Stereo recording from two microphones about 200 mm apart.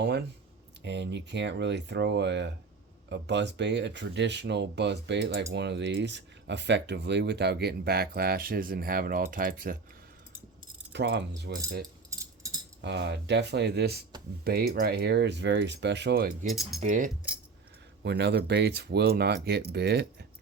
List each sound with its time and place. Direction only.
0.0 s speech: 55° right (ahead or behind)
10.9 s speech: 60° right (ahead or behind)
12.2 s a sound: 15° right (ahead or behind)
12.8 s speech: 60° right (ahead or behind)
16.5 s speech: centre (ahead or behind)
16.8 s speech: 40° right (ahead or behind)
18.0 s speech: 55° right (ahead or behind)